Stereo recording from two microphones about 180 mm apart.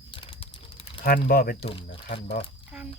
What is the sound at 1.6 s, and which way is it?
Speech, 30° left (ahead or behind).